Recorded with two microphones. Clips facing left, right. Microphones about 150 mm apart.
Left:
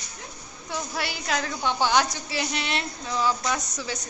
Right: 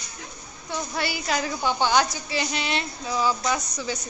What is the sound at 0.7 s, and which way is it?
A woman's voice, centre (ahead or behind).